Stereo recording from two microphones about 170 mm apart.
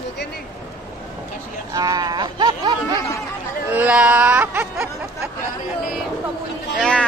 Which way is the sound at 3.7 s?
10° right (ahead or behind).